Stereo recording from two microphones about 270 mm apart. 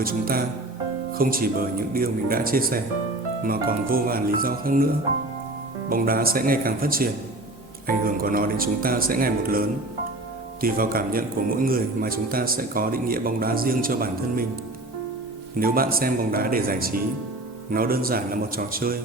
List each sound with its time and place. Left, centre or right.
0.0 s speech: right
5.9 s speech: right
15.5 s speech: right